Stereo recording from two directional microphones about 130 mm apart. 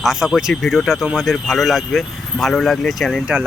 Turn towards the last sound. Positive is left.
turn(degrees=-5)  # may be behind; listen again after turning